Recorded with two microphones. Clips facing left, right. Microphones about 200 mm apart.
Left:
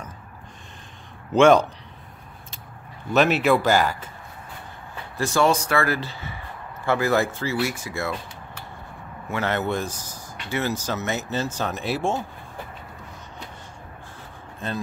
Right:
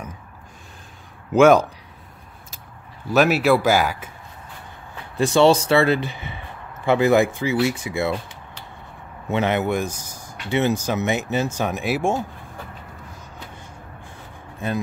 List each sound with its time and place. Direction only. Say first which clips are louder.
1.3 s speech: right 2 dB; 5° right (ahead or behind)
3.1 s speech: right 2 dB; 5° right (ahead or behind)
5.1 s speech: right 5 dB; 20° right (ahead or behind)
9.3 s speech: right 4 dB; 20° right (ahead or behind)
14.6 s speech: right 4 dB; 10° right (ahead or behind)